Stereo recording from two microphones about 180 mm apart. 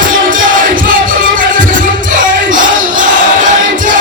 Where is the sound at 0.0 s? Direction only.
50° right (ahead or behind).